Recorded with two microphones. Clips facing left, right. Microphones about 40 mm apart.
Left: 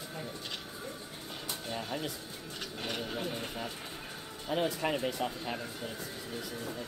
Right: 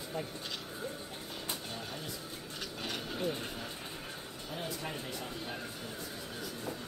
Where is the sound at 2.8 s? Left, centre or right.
Centre.